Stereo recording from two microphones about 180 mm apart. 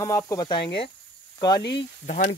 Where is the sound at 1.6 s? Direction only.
70° left (ahead or behind).